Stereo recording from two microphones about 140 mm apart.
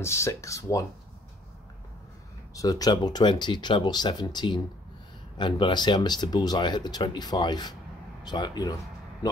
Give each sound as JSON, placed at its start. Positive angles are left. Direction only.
{"t": 0.0, "sound": "speech", "side_deg": 20}
{"t": 2.5, "sound": "speech", "side_deg": 25}